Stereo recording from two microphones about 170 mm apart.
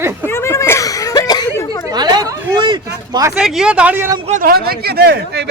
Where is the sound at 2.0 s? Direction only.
25° right (ahead or behind).